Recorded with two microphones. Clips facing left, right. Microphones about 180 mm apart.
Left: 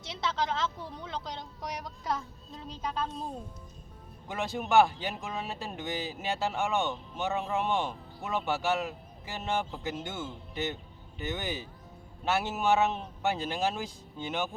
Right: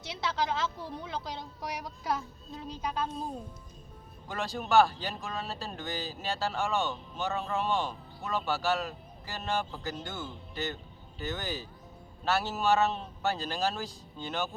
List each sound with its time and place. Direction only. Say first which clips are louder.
0.3 s speech: right 1 dB; 5° right (ahead or behind)
4.3 s speech: left 1 dB; 20° left (ahead or behind)